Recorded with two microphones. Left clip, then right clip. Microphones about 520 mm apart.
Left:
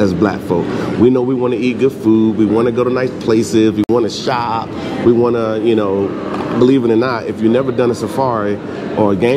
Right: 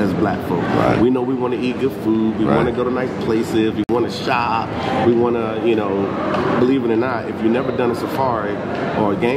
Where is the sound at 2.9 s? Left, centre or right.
Left.